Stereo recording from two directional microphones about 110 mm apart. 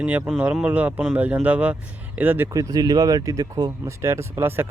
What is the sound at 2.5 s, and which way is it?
Speech, 35° right (ahead or behind).